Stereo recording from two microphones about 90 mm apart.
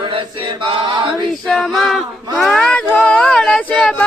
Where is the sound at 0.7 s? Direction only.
65° right (ahead or behind).